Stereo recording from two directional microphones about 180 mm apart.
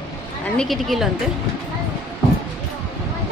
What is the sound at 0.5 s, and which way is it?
Speech, centre (ahead or behind).